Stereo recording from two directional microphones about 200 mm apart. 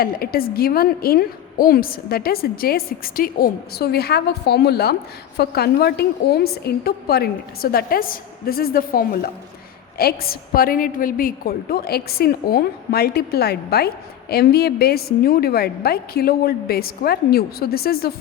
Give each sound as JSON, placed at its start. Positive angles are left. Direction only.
{"t": 0.0, "sound": "a woman's voice", "side_deg": 50}